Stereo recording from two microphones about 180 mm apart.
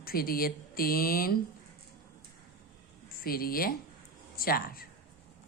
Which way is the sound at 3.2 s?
55° left (ahead or behind).